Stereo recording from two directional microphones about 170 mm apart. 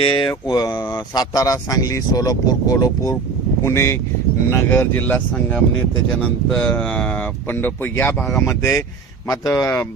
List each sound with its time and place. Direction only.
0.0 s speech: 30° left (ahead or behind)